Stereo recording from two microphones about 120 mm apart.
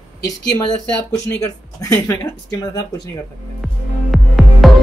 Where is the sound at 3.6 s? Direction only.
Centre (ahead or behind).